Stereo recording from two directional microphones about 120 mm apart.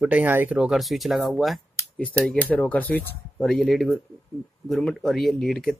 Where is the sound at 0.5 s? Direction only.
5° right (ahead or behind).